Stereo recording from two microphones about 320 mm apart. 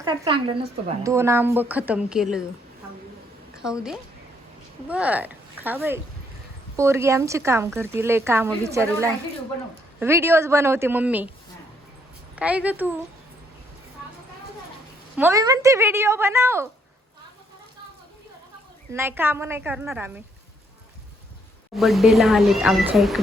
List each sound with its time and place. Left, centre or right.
0.0 s speech: centre
3.5 s a woman's voice: centre
12.4 s speech: centre
15.1 s speech: centre
18.9 s speech: centre
21.8 s speech: centre